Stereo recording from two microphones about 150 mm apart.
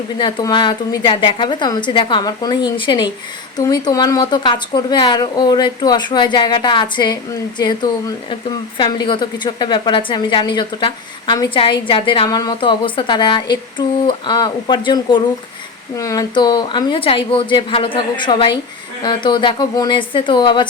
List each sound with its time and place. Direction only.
0.2 s a woman's voice: 30° left (ahead or behind)